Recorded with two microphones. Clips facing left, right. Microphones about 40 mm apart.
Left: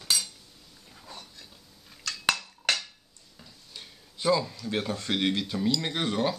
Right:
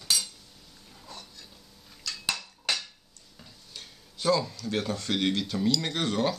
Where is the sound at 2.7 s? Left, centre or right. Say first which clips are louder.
Left 3 dB; left.